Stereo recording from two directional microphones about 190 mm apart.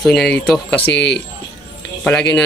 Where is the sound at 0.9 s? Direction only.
65° left (ahead or behind).